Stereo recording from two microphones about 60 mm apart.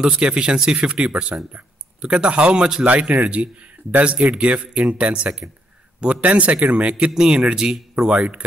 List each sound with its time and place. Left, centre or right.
0.0 s speech: centre